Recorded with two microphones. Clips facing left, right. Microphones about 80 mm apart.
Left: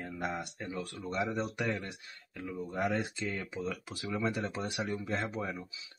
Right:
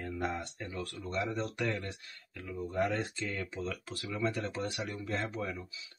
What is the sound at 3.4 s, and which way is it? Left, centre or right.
Speech, centre.